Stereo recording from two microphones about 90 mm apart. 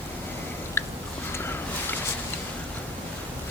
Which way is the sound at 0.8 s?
25° left (ahead or behind).